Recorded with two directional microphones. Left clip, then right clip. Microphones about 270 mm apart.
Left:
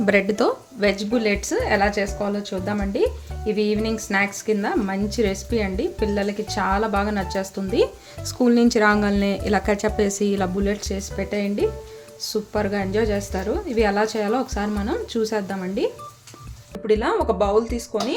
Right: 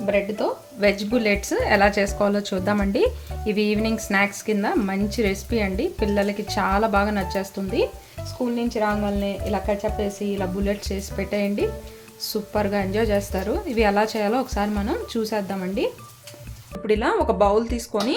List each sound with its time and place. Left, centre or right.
0.0 s a woman's voice: left
0.8 s speech: centre
8.4 s a woman's voice: left; by 17.8 s centre